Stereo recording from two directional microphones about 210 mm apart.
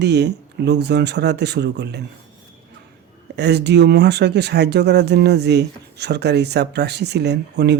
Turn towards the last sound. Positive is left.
turn(degrees=-55)  # may be behind; listen again after turning